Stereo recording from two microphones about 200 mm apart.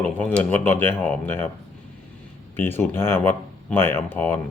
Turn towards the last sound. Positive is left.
turn(degrees=10)  # may be behind; listen again after turning